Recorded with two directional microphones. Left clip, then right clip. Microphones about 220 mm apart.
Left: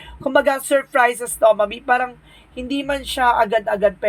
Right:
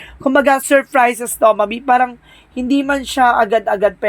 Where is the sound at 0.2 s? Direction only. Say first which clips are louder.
Right 4 dB; 50° right (ahead or behind).